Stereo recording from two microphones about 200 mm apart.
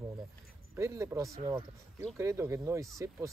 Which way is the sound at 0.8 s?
15° right (ahead or behind).